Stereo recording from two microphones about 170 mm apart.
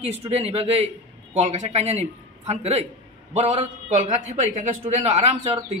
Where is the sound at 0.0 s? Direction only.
35° right (ahead or behind).